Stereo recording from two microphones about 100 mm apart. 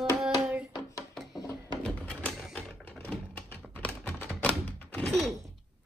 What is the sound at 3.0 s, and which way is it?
Typewriter, 15° left (ahead or behind).